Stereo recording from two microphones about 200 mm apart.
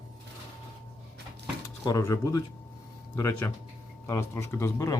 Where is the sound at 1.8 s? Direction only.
15° left (ahead or behind).